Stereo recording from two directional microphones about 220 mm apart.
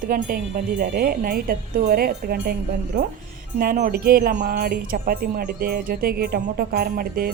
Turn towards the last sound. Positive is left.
turn(degrees=-40)  # may be behind; listen again after turning